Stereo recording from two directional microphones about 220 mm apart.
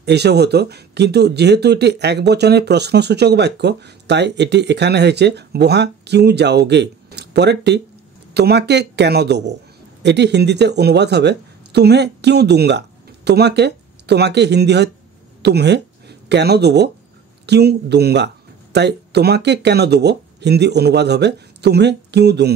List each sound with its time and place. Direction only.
0.0 s speech: 50° right (ahead or behind)